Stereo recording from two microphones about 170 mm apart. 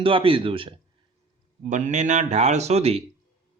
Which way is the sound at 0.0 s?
30° right (ahead or behind).